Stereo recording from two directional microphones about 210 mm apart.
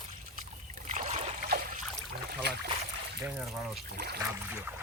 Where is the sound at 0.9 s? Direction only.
35° right (ahead or behind).